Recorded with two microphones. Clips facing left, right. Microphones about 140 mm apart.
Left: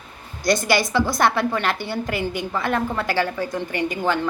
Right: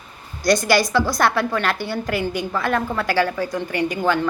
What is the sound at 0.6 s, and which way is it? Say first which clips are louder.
A woman's voice: right 2 dB; 20° left (ahead or behind).